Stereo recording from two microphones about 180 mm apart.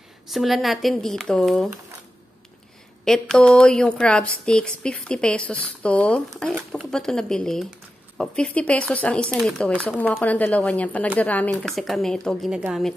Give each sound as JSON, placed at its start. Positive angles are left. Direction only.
{"t": 0.3, "sound": "a woman's voice", "side_deg": 0}
{"t": 3.1, "sound": "a woman's voice", "side_deg": 5}